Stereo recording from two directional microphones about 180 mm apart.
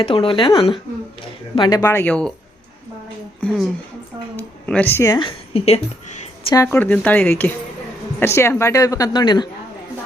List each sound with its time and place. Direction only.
0.0 s speech: 30° left (ahead or behind)
1.8 s a woman's voice: 10° left (ahead or behind)
3.4 s a woman's voice: centre (ahead or behind)
5.1 s a woman's voice: 30° left (ahead or behind)
6.5 s a woman's voice: 15° left (ahead or behind)